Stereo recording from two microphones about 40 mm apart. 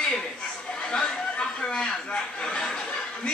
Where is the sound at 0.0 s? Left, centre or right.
Left.